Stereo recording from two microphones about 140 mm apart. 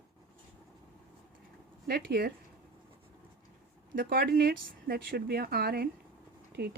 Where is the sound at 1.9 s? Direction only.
90° right.